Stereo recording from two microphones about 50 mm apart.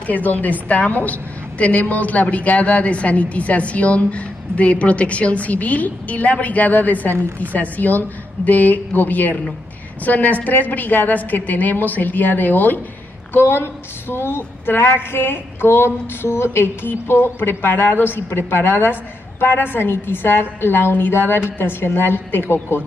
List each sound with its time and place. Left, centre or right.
0.0 s a woman's voice: left